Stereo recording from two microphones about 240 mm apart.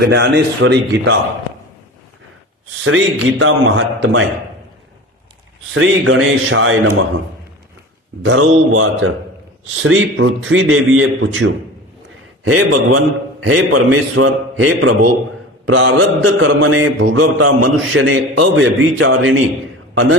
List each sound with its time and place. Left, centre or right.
0.0 s speech: right
2.8 s mantra: right
5.7 s mantra: right
8.2 s mantra: right
9.6 s speech: right
10.0 s mantra: right
12.5 s a man's voice: right
13.4 s mantra: right
17.7 s speech: right
18.8 s mantra: right
19.9 s a man's voice: right